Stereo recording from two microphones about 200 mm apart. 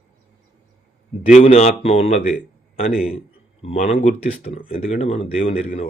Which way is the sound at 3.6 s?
35° left (ahead or behind).